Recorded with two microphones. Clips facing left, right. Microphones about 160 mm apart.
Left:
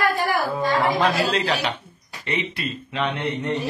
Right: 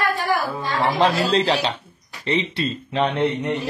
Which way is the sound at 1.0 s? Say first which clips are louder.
Right 3 dB; 30° right (ahead or behind).